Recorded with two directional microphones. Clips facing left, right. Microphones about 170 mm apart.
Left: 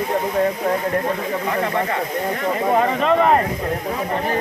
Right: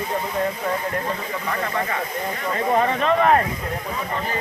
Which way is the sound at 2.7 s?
5° left (ahead or behind).